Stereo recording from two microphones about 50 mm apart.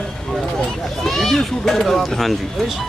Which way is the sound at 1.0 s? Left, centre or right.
Centre.